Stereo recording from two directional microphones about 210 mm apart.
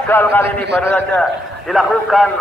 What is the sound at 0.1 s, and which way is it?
Speech, 10° left (ahead or behind).